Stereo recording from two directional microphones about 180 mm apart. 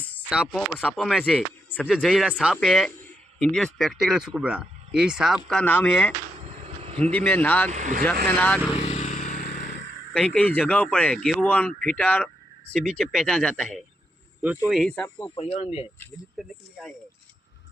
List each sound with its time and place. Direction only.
0.3 s speech: centre (ahead or behind)
5.5 s speech: 5° left (ahead or behind)
6.4 s insect: 35° right (ahead or behind)
7.0 s speech: 5° left (ahead or behind)
7.7 s speech: 45° right (ahead or behind)
8.3 s speech: 10° left (ahead or behind)
8.7 s vehicle: 35° left (ahead or behind)
9.3 s vehicle: 50° left (ahead or behind)
10.1 s speech: 5° left (ahead or behind)
15.4 s speech: 35° left (ahead or behind)
16.4 s speech: centre (ahead or behind)